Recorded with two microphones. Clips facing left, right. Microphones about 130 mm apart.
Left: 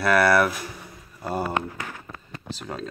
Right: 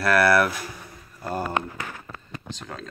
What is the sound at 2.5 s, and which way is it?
Speech, 10° left (ahead or behind).